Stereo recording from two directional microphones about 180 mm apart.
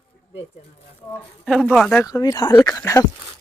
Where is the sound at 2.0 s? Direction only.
20° left (ahead or behind).